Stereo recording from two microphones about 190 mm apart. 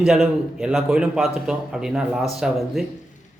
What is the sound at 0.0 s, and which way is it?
A man's voice, centre (ahead or behind).